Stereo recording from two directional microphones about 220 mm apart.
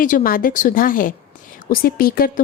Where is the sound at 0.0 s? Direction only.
40° left (ahead or behind).